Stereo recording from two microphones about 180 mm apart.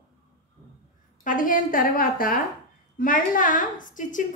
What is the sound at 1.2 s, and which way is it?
A woman's voice, 50° left (ahead or behind).